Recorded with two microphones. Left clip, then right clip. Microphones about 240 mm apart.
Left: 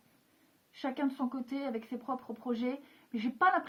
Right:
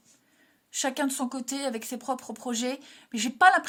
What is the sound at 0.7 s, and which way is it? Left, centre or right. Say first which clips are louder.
Speech: right 7 dB; right.